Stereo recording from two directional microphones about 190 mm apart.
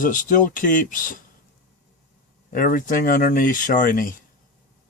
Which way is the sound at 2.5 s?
45° left (ahead or behind).